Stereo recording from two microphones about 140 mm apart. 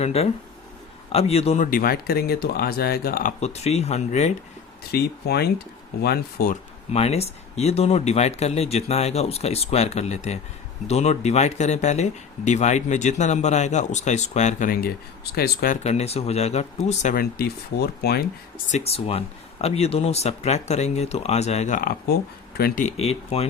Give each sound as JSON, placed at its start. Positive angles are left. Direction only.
{"t": 0.0, "sound": "speech", "side_deg": 45}
{"t": 1.6, "sound": "speech", "side_deg": 90}
{"t": 3.4, "sound": "speech", "side_deg": 50}
{"t": 4.9, "sound": "speech", "side_deg": 90}
{"t": 6.4, "sound": "speech", "side_deg": 90}
{"t": 6.9, "sound": "speech", "side_deg": 50}
{"t": 15.4, "sound": "speech", "side_deg": 80}
{"t": 15.8, "sound": "speech", "side_deg": 50}
{"t": 18.7, "sound": "speech", "side_deg": 45}